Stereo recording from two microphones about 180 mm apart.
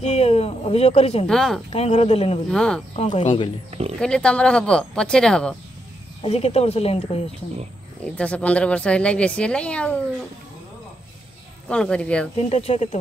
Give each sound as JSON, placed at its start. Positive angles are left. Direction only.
{"t": 0.0, "sound": "speech", "side_deg": 35}
{"t": 1.2, "sound": "speech", "side_deg": 5}
{"t": 1.7, "sound": "speech", "side_deg": 35}
{"t": 2.5, "sound": "speech", "side_deg": 5}
{"t": 3.0, "sound": "speech", "side_deg": 30}
{"t": 4.0, "sound": "speech", "side_deg": 5}
{"t": 6.2, "sound": "speech", "side_deg": 35}
{"t": 8.0, "sound": "speech", "side_deg": 5}
{"t": 11.7, "sound": "speech", "side_deg": 5}
{"t": 12.4, "sound": "speech", "side_deg": 35}